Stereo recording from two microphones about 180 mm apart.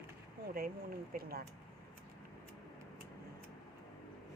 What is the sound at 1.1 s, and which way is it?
Speech, 55° right (ahead or behind).